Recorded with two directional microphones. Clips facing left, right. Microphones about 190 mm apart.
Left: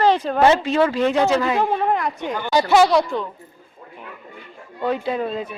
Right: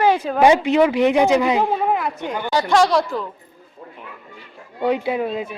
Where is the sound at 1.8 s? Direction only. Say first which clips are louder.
Even; 5° right (ahead or behind).